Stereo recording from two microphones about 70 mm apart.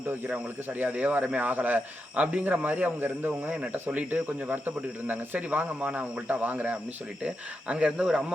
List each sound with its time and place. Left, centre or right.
0.8 s speech: right